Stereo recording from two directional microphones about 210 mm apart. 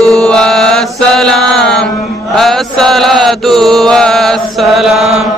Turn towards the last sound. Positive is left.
turn(degrees=0)  # may be behind; listen again after turning